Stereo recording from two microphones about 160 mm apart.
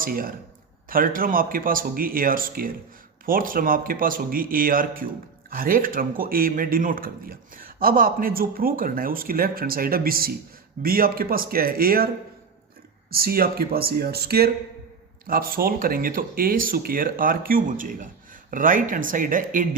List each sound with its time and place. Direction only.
0.0 s a man's voice: 65° right (ahead or behind)
13.1 s speech: 70° right (ahead or behind)
15.3 s a man's voice: 65° right (ahead or behind)